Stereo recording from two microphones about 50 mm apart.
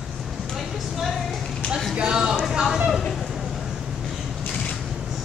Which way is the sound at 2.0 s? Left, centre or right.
Centre.